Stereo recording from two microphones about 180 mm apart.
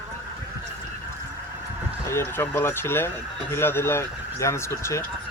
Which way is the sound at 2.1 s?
15° left (ahead or behind).